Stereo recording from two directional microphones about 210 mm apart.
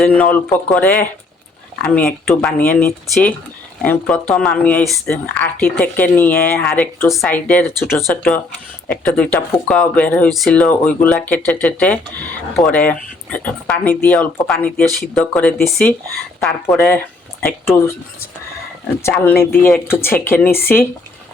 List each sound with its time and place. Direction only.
0.0 s speech: 5° left (ahead or behind)
19.0 s speech: 10° left (ahead or behind)